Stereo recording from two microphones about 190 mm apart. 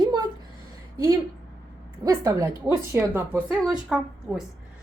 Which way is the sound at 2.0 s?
20° right (ahead or behind).